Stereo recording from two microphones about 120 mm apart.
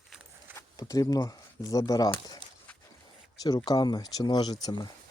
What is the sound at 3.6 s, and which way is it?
Speech, 35° left (ahead or behind).